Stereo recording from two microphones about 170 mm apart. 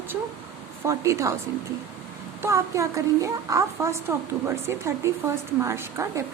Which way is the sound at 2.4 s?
20° right (ahead or behind).